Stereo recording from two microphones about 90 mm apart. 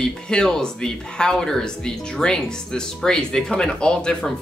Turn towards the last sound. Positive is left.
turn(degrees=10)  # may be behind; listen again after turning